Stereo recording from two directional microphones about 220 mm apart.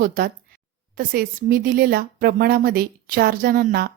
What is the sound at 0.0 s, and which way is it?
Speech, 40° right (ahead or behind).